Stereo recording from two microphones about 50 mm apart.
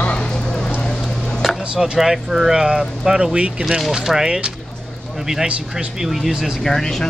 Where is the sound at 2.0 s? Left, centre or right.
Centre.